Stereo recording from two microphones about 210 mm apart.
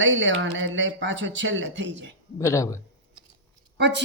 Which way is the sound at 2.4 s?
15° left (ahead or behind).